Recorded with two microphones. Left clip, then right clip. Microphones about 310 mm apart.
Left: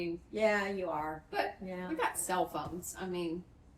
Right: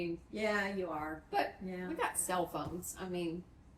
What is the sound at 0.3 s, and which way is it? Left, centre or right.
Music, centre.